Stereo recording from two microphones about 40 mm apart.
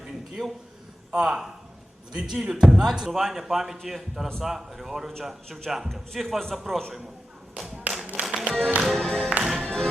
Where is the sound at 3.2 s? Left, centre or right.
Centre.